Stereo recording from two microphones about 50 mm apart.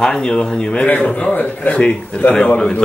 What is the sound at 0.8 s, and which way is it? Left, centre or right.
A man's voice, left.